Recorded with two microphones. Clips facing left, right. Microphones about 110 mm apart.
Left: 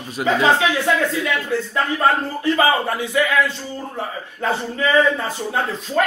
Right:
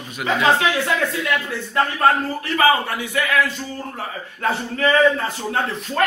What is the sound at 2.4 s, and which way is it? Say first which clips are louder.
Speech: left 1 dB; 25° left (ahead or behind).